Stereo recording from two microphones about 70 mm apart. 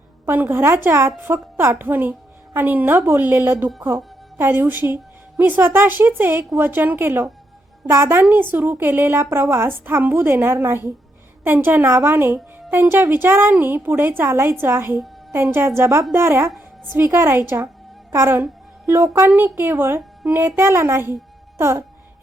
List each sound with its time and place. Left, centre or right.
0.3 s a woman's voice: right
19.3 s a woman's voice: right